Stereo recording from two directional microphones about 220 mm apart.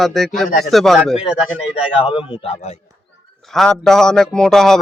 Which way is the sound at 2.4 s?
30° left (ahead or behind).